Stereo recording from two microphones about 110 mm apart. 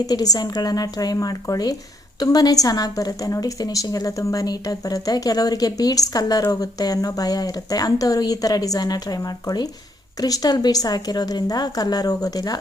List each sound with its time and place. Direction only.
0.0 s a woman's voice: 35° left (ahead or behind)